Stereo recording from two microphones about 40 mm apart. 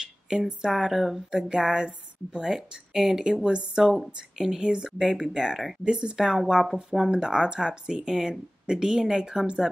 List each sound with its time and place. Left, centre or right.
0.3 s speech: centre
0.7 s speech: centre
1.3 s speech: centre
2.4 s speech: centre